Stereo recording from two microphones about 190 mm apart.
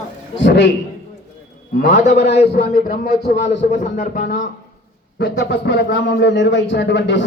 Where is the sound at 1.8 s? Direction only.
40° left (ahead or behind).